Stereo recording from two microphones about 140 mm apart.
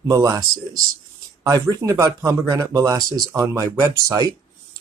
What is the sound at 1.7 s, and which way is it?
Speech, 25° right (ahead or behind).